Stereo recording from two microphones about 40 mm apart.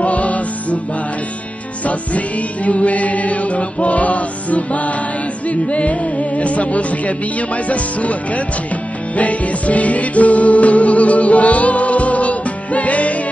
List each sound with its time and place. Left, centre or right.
0.0 s music: left
1.9 s music: left